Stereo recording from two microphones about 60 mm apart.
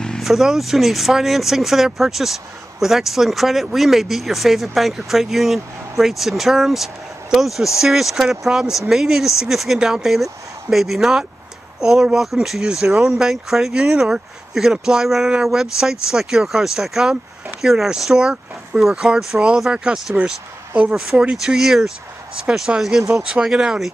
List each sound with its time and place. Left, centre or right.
0.2 s speech: centre